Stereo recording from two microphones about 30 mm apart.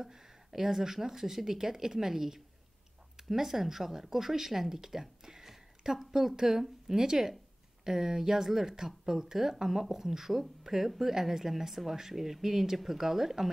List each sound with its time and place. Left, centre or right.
0.0 s speech: centre
5.2 s a sound: centre
6.3 s speech: centre